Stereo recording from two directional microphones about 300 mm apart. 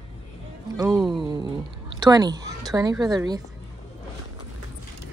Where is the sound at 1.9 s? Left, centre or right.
Centre.